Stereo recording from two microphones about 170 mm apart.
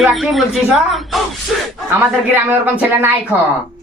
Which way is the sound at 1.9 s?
10° right (ahead or behind).